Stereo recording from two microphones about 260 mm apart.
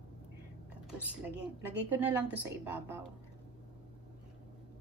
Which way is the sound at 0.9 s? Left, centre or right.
Centre.